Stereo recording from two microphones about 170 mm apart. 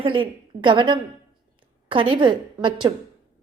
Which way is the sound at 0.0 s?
30° right (ahead or behind).